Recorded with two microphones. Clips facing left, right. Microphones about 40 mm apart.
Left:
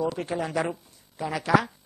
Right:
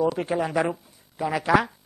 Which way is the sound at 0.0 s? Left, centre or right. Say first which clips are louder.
Right 4 dB; centre.